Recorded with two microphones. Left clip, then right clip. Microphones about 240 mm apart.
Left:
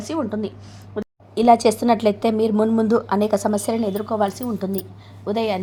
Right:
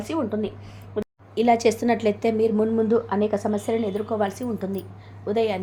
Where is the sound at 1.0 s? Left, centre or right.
Centre.